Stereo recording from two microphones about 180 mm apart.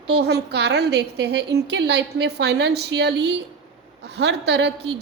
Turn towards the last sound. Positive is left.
turn(degrees=-70)  # may be behind; listen again after turning